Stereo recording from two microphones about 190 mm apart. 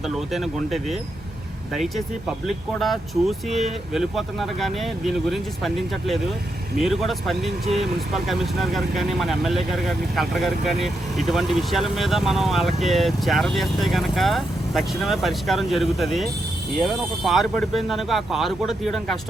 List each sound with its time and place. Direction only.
0.1 s speech: centre (ahead or behind)